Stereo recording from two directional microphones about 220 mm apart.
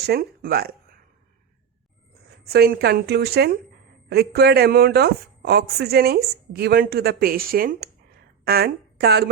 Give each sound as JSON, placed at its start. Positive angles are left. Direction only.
{"t": 0.0, "sound": "speech", "side_deg": -45}
{"t": 2.4, "sound": "a woman's voice", "side_deg": -45}